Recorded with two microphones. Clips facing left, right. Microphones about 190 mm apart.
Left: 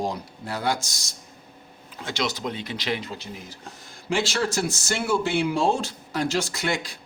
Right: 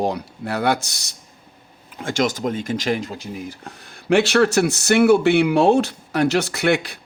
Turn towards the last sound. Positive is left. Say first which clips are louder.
# right 8 dB
turn(degrees=-65)  # may be behind; listen again after turning